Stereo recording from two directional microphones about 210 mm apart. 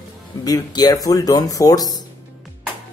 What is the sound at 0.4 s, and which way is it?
Speech, 20° left (ahead or behind).